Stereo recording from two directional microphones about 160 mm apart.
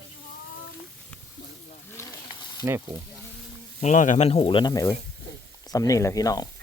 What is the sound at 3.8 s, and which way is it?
Speech, 50° left (ahead or behind).